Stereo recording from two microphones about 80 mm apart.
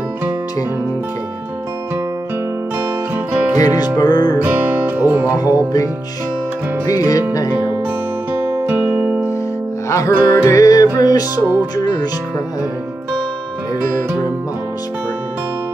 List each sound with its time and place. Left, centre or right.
3.5 s music: left
4.4 s music: right
5.4 s music: left
6.9 s music: left
8.3 s music: right
9.8 s music: left